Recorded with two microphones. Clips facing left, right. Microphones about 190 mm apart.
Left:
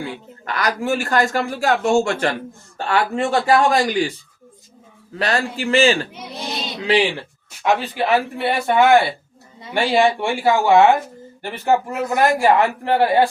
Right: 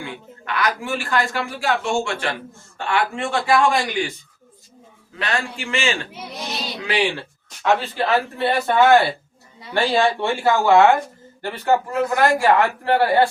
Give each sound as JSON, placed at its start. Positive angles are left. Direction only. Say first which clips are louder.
{"t": 0.0, "sound": "a man's voice", "louder": "left 4 dB", "side_deg": 40}
{"t": 5.2, "sound": "speech", "louder": "left 5 dB", "side_deg": 35}
{"t": 6.3, "sound": "a sound", "louder": "left 2 dB", "side_deg": 30}
{"t": 7.6, "sound": "a man's voice", "louder": "left 1 dB", "side_deg": 15}